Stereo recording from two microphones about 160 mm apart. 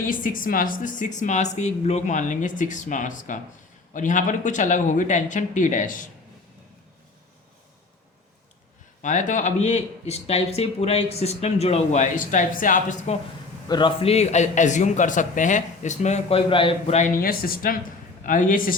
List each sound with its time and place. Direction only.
0.1 s speech: 55° left (ahead or behind)
9.0 s speech: 50° left (ahead or behind)
13.7 s speech: 30° left (ahead or behind); by 16.4 s 45° left (ahead or behind)
16.5 s a man's voice: 35° left (ahead or behind)
17.2 s a man's voice: 65° left (ahead or behind)